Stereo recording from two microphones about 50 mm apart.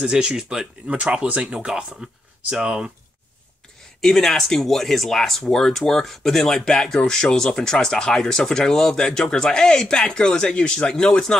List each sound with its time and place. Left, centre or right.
0.0 s speech: centre
0.8 s speech: right
4.0 s speech: centre